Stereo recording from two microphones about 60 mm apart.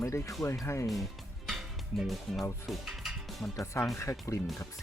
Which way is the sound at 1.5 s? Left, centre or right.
Centre.